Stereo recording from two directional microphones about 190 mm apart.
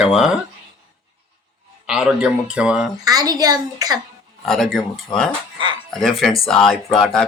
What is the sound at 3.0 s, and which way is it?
Speech, 20° right (ahead or behind).